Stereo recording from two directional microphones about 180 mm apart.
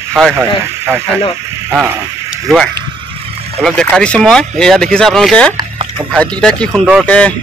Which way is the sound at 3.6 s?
5° left (ahead or behind).